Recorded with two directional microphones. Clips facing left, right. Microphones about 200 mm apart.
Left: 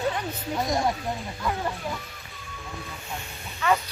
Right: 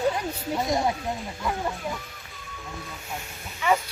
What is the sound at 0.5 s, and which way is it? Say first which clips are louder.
Speech: even; 5° right (ahead or behind).